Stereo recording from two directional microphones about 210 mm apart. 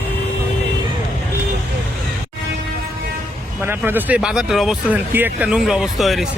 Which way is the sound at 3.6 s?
10° right (ahead or behind).